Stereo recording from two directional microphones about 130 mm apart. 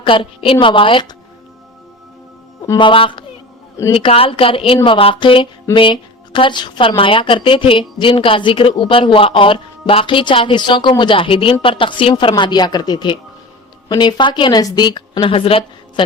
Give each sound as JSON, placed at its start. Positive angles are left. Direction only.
{"t": 0.0, "sound": "a woman's voice", "side_deg": 40}
{"t": 2.7, "sound": "a woman's voice", "side_deg": 40}